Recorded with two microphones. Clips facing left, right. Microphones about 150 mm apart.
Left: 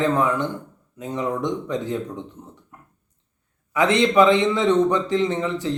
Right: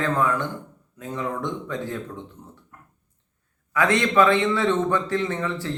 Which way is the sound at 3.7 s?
20° left (ahead or behind).